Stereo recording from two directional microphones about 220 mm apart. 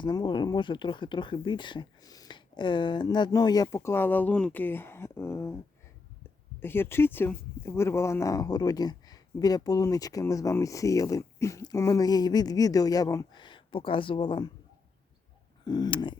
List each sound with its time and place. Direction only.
0.0 s speech: 20° left (ahead or behind)
6.6 s speech: 10° left (ahead or behind)
15.6 s speech: 20° left (ahead or behind)